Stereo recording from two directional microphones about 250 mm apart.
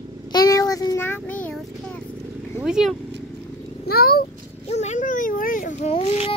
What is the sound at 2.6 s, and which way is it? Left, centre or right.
Speech, centre.